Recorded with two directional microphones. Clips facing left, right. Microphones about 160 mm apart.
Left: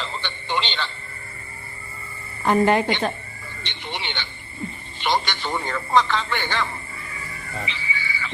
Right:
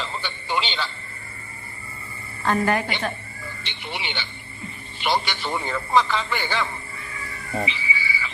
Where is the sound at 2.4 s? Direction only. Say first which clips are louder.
Left 4 dB; 20° left (ahead or behind).